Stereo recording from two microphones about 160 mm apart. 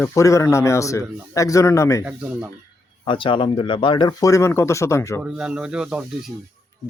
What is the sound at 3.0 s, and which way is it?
Speech, 30° left (ahead or behind).